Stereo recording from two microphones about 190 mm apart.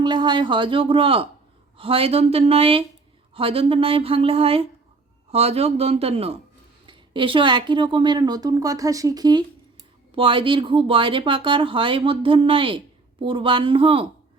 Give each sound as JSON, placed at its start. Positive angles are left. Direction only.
{"t": 0.0, "sound": "speech", "side_deg": -25}